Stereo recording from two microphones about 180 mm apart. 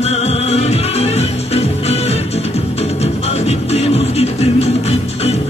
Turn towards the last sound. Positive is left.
turn(degrees=35)  # may be behind; listen again after turning